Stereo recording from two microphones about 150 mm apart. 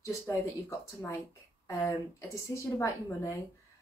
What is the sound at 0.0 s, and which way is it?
Speech, 20° left (ahead or behind).